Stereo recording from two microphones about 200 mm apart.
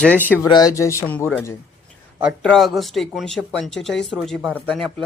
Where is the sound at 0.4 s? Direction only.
20° left (ahead or behind).